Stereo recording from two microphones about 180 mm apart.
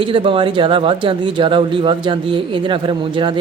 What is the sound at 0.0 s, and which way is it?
Speech, 30° right (ahead or behind).